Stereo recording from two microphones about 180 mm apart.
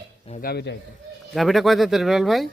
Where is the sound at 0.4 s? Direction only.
70° left (ahead or behind).